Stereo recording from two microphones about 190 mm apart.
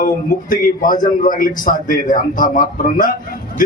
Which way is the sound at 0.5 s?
45° left (ahead or behind).